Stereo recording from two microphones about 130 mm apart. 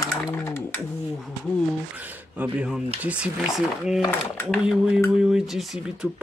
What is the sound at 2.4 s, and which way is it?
Speech, 5° right (ahead or behind).